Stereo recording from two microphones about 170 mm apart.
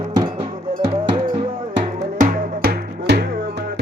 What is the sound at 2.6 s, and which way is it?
Music, 80° right.